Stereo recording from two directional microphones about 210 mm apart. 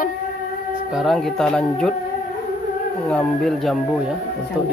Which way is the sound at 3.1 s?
5° left (ahead or behind).